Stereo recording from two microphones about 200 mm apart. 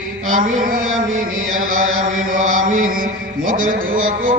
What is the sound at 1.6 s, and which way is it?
Chant, 40° right (ahead or behind).